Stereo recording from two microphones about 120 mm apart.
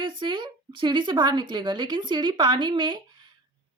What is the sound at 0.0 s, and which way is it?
A woman's voice, 40° right (ahead or behind).